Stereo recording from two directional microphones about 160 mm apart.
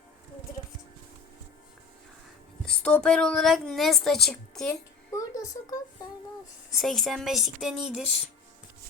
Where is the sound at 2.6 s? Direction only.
5° left (ahead or behind).